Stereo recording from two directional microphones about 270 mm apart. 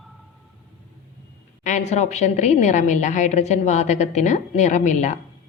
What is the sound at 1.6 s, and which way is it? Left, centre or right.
A woman's voice, left.